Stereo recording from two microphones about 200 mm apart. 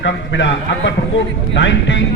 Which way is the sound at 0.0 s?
65° left (ahead or behind).